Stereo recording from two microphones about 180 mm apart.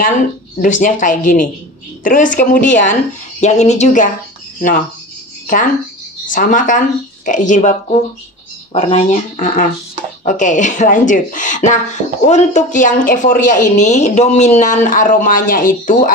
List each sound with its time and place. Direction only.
0.6 s speech: 45° left (ahead or behind)
6.3 s speech: 45° left (ahead or behind)